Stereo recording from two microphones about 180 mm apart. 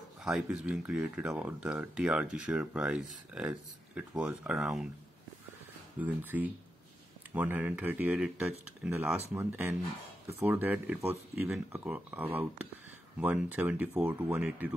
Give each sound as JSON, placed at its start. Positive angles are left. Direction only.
{"t": 0.2, "sound": "speech", "side_deg": -5}
{"t": 5.9, "sound": "speech", "side_deg": -10}